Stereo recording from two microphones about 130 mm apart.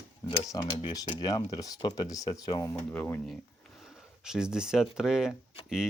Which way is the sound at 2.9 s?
15° left (ahead or behind).